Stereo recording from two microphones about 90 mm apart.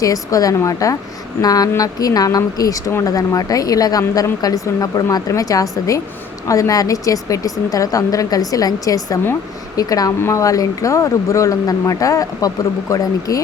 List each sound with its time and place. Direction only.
0.0 s a woman's voice: 40° left (ahead or behind)